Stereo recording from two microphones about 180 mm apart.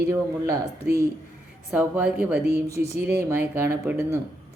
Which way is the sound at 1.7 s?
5° right (ahead or behind).